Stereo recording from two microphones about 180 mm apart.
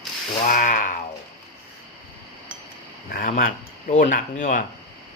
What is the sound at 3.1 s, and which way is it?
Speech, 55° left (ahead or behind).